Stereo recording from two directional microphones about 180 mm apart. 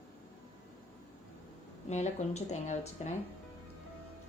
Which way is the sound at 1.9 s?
40° left (ahead or behind).